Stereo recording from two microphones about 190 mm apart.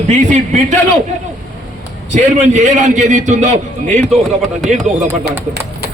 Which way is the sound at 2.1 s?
40° right (ahead or behind).